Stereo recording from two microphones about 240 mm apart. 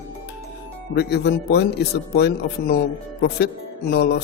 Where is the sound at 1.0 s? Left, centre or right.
Left.